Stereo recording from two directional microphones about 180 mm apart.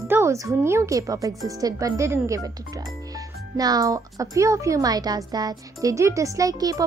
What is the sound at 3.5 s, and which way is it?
Speech, 20° right (ahead or behind).